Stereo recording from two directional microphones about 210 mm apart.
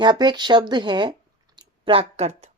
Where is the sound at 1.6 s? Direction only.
25° right (ahead or behind).